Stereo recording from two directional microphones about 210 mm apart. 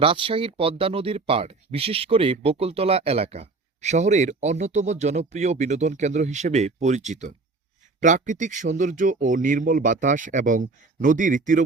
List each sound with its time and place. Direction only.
0.0 s speech: 25° right (ahead or behind)